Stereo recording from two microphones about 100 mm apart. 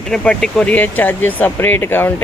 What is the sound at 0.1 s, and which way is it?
Speech, 5° left (ahead or behind).